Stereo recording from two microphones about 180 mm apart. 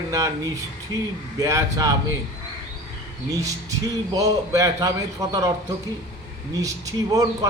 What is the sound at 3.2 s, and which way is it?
A man's voice, 20° right (ahead or behind).